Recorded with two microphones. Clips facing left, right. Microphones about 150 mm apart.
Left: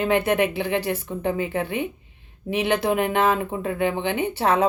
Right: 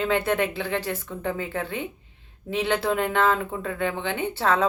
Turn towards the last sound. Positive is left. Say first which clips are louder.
# left 3 dB
turn(degrees=15)  # may be behind; listen again after turning